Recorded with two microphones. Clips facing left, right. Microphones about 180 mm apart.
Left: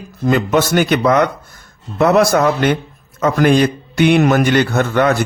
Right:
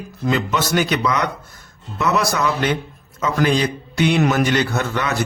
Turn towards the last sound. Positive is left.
turn(degrees=55)  # may be behind; listen again after turning